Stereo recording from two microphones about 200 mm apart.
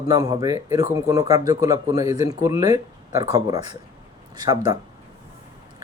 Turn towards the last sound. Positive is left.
turn(degrees=-20)  # may be behind; listen again after turning